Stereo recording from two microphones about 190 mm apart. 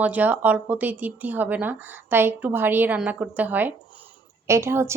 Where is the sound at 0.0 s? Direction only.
10° right (ahead or behind).